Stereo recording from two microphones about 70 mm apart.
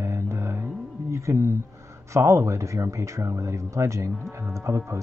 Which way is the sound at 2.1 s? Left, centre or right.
Right.